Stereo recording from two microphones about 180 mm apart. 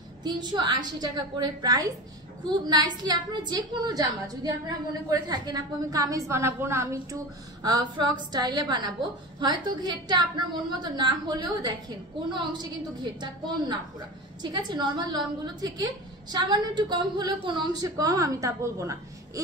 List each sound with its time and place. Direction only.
0.2 s a woman's voice: 25° right (ahead or behind)